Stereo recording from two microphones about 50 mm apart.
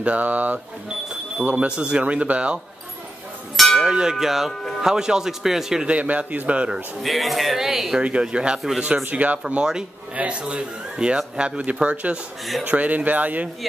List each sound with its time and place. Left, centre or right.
0.0 s speech: right
3.5 s a sound: centre
3.8 s a man's voice: centre
5.9 s speech: right
7.0 s speech: centre
8.0 s speech: centre
9.0 s speech: right